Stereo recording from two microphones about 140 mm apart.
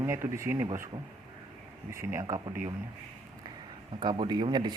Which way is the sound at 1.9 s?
20° right (ahead or behind).